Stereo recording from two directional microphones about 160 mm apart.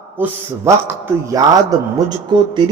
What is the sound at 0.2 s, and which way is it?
A man's voice, 15° right (ahead or behind).